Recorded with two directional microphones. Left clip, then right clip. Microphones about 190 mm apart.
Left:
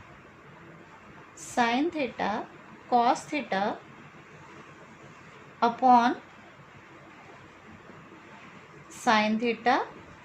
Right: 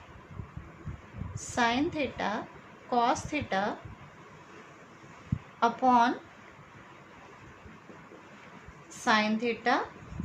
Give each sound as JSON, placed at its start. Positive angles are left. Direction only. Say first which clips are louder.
{"t": 1.5, "sound": "a woman's voice", "louder": "left 2 dB", "side_deg": 20}
{"t": 5.5, "sound": "a woman's voice", "louder": "left 3 dB", "side_deg": 25}
{"t": 9.0, "sound": "a woman's voice", "louder": "left 2 dB", "side_deg": 25}